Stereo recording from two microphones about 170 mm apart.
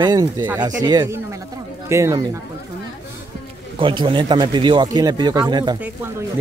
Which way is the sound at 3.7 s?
30° right (ahead or behind).